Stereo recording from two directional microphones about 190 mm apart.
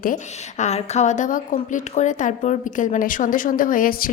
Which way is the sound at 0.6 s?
35° left (ahead or behind).